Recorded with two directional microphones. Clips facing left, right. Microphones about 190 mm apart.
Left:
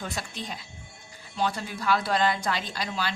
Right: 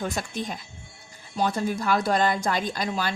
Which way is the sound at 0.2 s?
50° right (ahead or behind).